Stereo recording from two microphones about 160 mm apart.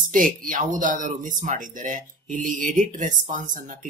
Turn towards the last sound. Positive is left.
turn(degrees=-55)  # may be behind; listen again after turning